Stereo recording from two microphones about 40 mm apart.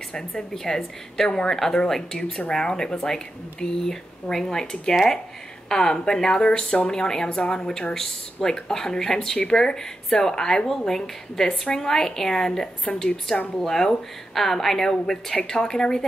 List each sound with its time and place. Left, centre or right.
0.4 s a woman's voice: centre
9.5 s a woman's voice: left